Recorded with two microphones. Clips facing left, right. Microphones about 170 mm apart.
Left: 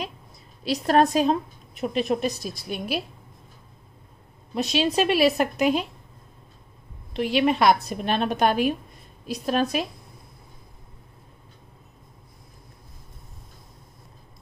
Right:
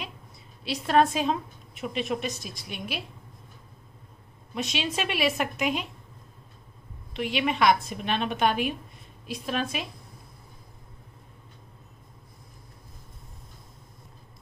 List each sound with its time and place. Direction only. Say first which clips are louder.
0.7 s a woman's voice: left 3 dB; 40° left (ahead or behind)
4.6 s a woman's voice: left 7 dB; 35° left (ahead or behind)
7.2 s a woman's voice: left 5 dB; 40° left (ahead or behind)